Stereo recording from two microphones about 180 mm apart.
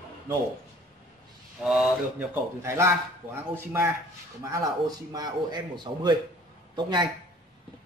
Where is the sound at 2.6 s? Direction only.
15° right (ahead or behind).